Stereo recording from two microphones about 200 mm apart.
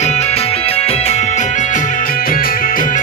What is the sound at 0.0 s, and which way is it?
Music, 35° left (ahead or behind).